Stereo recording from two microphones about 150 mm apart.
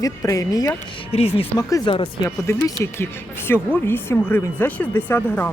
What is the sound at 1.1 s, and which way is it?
A woman's voice, 40° left (ahead or behind).